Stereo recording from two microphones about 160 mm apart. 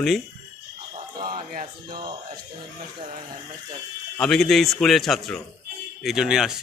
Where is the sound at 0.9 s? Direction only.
30° right (ahead or behind).